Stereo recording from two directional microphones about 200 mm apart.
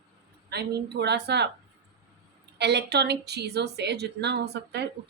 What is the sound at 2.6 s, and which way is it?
A woman's voice, 55° right (ahead or behind).